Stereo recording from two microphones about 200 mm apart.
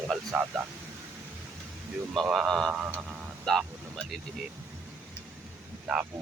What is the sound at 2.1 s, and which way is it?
Speech, 5° right (ahead or behind).